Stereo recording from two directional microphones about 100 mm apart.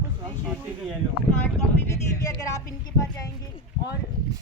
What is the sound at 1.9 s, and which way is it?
Speech, 30° left (ahead or behind).